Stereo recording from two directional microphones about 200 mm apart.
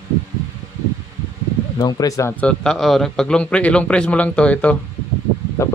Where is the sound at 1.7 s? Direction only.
20° left (ahead or behind).